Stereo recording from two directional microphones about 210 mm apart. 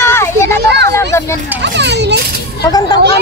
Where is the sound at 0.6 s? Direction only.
55° right (ahead or behind).